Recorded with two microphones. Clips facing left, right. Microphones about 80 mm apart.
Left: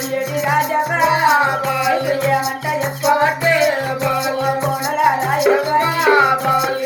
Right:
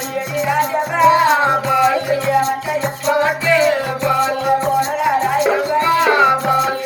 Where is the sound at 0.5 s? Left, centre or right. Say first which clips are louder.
Even; right.